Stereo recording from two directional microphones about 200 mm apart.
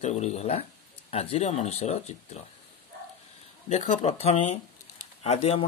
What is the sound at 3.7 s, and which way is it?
Speech, 35° left (ahead or behind).